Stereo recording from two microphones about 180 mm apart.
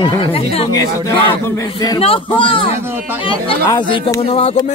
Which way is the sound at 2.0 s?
30° left (ahead or behind).